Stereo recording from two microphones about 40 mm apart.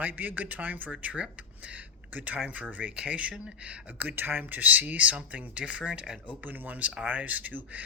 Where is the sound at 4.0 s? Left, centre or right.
Right.